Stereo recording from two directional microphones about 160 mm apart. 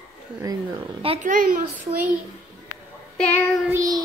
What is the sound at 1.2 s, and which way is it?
Speech, 60° right (ahead or behind).